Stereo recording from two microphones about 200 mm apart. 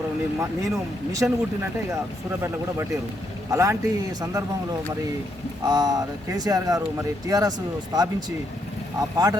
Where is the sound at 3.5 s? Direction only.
15° right (ahead or behind).